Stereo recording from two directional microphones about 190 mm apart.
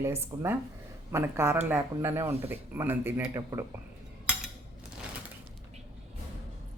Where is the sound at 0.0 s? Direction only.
15° right (ahead or behind).